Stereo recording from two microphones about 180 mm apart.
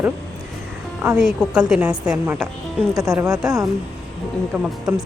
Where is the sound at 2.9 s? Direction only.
20° right (ahead or behind).